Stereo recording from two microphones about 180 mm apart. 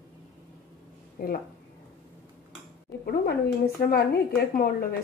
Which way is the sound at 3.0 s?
55° left (ahead or behind).